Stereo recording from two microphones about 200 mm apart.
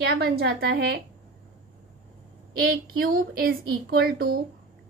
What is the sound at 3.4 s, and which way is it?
Speech, 50° right (ahead or behind).